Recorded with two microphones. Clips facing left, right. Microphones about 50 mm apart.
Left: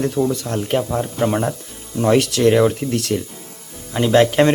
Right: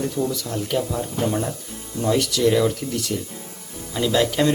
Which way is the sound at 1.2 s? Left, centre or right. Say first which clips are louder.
Left 5 dB; left.